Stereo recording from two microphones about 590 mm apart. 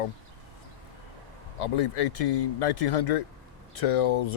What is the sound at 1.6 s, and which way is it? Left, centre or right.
Speech, left.